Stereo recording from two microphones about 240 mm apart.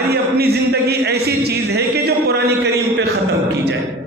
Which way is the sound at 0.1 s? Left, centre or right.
Right.